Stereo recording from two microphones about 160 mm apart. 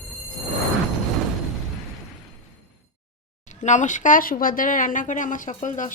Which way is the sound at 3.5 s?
50° left (ahead or behind).